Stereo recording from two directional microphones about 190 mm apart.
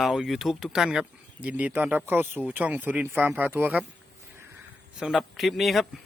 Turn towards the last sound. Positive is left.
turn(degrees=0)  # may be behind; listen again after turning